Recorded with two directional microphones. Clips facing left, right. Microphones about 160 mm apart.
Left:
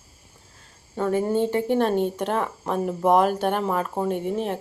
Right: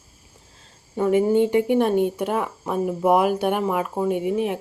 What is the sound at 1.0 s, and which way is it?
A woman's voice, 15° right (ahead or behind).